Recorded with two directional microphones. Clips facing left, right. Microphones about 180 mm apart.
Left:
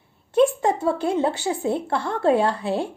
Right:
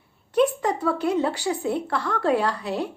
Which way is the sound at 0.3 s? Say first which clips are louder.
Left 3 dB; 25° left (ahead or behind).